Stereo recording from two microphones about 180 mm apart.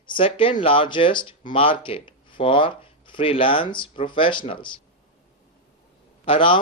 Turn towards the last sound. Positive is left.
turn(degrees=30)  # may be behind; listen again after turning